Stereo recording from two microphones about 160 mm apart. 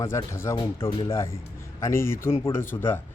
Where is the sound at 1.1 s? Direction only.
15° left (ahead or behind).